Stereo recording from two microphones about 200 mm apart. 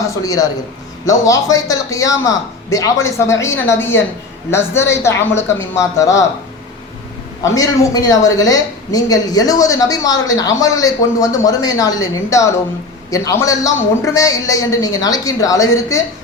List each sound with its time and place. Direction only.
0.2 s a woman's voice: 20° left (ahead or behind)
7.4 s a woman's voice: 15° left (ahead or behind)